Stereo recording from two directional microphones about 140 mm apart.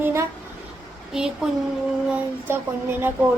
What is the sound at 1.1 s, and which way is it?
Speech, 5° right (ahead or behind).